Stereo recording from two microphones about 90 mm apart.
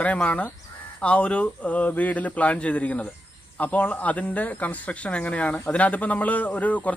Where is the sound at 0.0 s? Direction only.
15° left (ahead or behind).